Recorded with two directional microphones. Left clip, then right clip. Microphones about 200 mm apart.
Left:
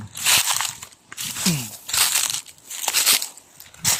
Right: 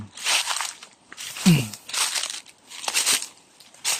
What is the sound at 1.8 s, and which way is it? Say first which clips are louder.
Crumpling: left 6 dB; 50° left (ahead or behind).